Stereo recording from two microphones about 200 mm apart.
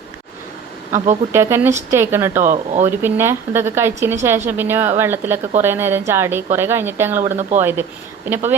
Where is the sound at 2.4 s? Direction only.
35° right (ahead or behind).